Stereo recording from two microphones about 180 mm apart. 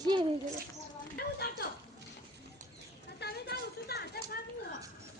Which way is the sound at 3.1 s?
65° left (ahead or behind).